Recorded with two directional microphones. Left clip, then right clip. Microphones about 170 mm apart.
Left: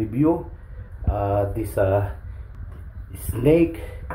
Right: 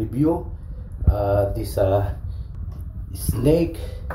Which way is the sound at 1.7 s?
25° left (ahead or behind).